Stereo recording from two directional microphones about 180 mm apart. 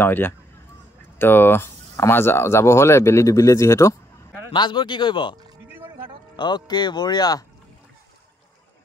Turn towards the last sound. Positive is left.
turn(degrees=20)  # may be behind; listen again after turning